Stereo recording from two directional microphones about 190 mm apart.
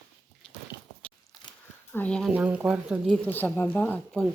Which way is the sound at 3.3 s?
10° left (ahead or behind).